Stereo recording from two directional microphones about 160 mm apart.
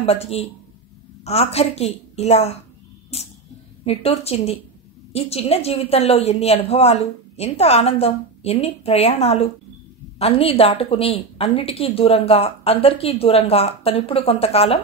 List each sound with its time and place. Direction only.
0.0 s a woman's voice: 40° left (ahead or behind)
3.1 s a sound: 40° left (ahead or behind)
3.8 s a woman's voice: 40° left (ahead or behind)